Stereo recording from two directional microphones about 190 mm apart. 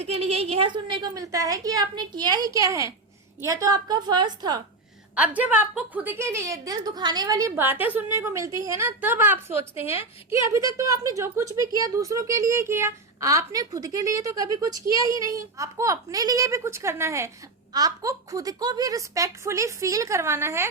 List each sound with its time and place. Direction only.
0.0 s a woman's voice: 30° right (ahead or behind)
5.1 s a woman's voice: 10° right (ahead or behind)
9.7 s a woman's voice: 30° left (ahead or behind)
10.3 s a woman's voice: 15° right (ahead or behind)